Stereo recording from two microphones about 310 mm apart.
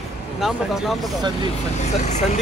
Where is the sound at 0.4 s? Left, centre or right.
Centre.